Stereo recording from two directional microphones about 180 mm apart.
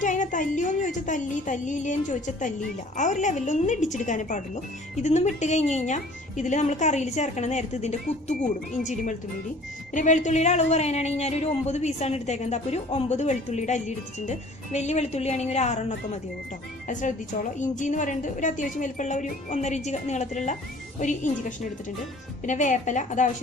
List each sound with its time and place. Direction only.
0.0 s a woman's voice: 45° left (ahead or behind)